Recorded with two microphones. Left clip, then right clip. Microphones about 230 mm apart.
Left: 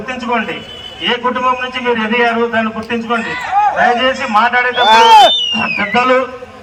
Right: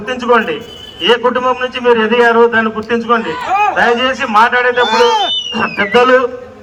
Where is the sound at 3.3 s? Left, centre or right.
Right.